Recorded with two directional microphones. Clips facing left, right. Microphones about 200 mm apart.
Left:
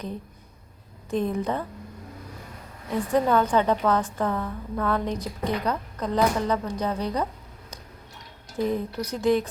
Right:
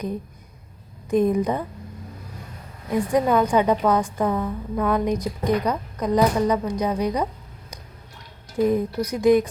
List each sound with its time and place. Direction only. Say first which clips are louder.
1.1 s a woman's voice: right 6 dB; 15° right (ahead or behind)
2.9 s a woman's voice: right 2 dB; 15° right (ahead or behind)
8.5 s a woman's voice: right 6 dB; 10° right (ahead or behind)